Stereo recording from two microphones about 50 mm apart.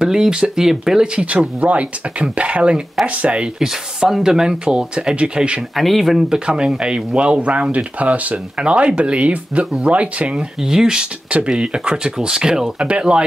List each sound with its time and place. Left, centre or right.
0.0 s speech: centre
3.5 s speech: centre
5.8 s speech: centre
6.2 s speech: centre
10.3 s speech: centre
11.2 s speech: right
12.7 s speech: right